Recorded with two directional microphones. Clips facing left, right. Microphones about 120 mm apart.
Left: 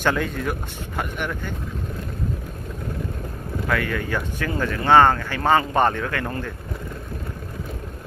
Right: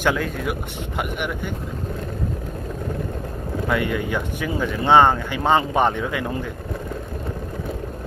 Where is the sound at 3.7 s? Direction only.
15° right (ahead or behind).